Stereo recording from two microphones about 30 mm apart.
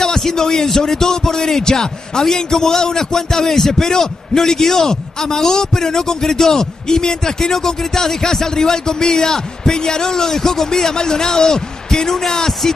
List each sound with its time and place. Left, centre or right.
0.4 s a man's voice: centre